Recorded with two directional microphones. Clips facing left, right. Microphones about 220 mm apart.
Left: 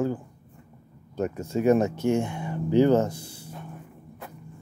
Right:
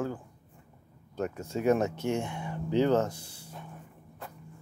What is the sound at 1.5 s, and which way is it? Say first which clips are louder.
Speech: left 5 dB; 5° left (ahead or behind).